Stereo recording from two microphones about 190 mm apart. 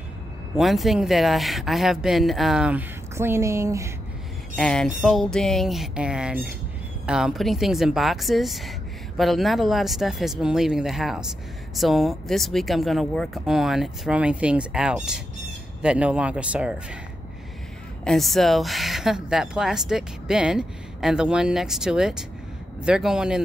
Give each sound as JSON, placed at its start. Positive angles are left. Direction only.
{"t": 0.6, "sound": "speech", "side_deg": 0}
{"t": 4.6, "sound": "speech", "side_deg": 5}
{"t": 18.0, "sound": "speech", "side_deg": 0}